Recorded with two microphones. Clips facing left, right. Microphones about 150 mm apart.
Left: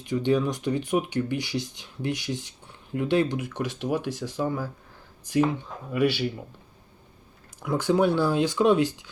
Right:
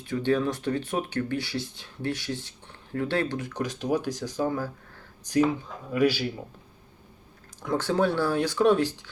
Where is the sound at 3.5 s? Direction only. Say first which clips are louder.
Right 1 dB; 5° left (ahead or behind).